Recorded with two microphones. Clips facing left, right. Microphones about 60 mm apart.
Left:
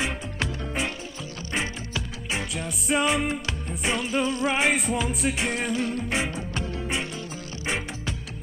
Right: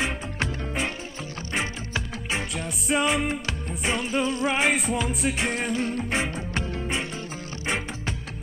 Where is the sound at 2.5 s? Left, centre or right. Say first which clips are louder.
Left 1 dB; centre.